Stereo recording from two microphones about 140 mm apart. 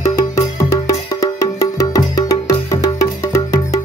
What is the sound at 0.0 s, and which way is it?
Music, 20° left (ahead or behind).